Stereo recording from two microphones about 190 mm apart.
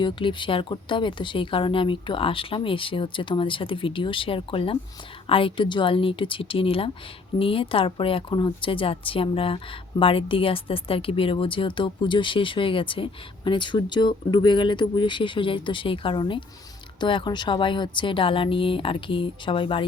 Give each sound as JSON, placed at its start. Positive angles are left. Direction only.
{"t": 0.0, "sound": "speech", "side_deg": 25}